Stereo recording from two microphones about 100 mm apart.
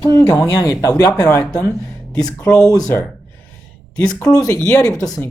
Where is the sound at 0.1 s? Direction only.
35° left (ahead or behind).